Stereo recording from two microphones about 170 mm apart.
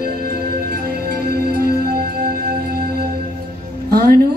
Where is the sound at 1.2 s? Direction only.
65° right (ahead or behind).